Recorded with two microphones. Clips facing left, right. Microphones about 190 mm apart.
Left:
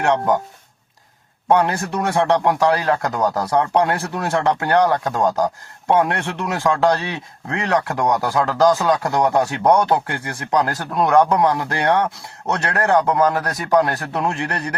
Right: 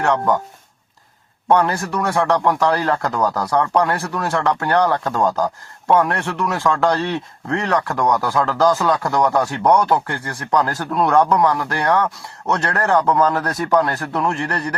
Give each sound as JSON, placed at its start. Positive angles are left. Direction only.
{"t": 0.0, "sound": "speech", "side_deg": 20}
{"t": 1.5, "sound": "speech", "side_deg": 15}